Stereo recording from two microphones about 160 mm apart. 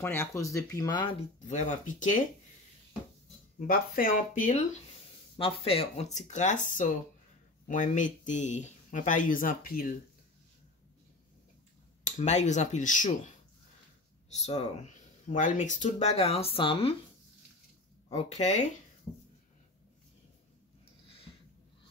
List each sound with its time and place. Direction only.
0.0 s speech: 15° left (ahead or behind)
1.5 s speech: 50° left (ahead or behind)
3.5 s speech: 65° left (ahead or behind)
5.4 s speech: 35° left (ahead or behind); by 9.9 s 60° left (ahead or behind)
12.0 s speech: 45° left (ahead or behind)
14.3 s speech: 45° left (ahead or behind)
18.1 s speech: 45° left (ahead or behind)